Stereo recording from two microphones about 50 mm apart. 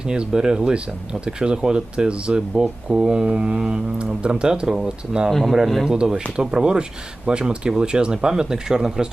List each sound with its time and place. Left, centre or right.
0.1 s speech: centre
5.3 s speech: centre
5.9 s speech: centre